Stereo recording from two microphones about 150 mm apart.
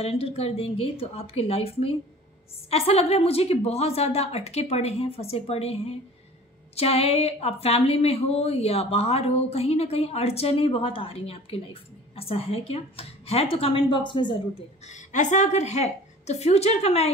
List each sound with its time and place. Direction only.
0.0 s a woman's voice: 40° left (ahead or behind)
14.9 s a woman's voice: 55° left (ahead or behind)